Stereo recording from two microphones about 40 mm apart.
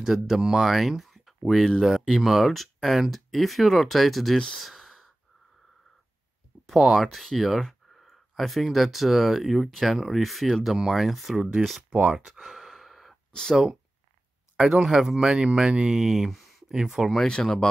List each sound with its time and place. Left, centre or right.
0.0 s speech: centre
4.6 s sigh: centre
6.6 s speech: centre
11.6 s speech: centre
12.1 s sigh: centre
13.3 s speech: centre
14.6 s speech: centre
15.3 s speech: right
17.3 s speech: centre